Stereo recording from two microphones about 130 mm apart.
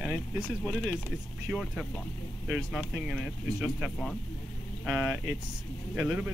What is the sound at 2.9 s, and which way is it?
Speech, 5° right (ahead or behind).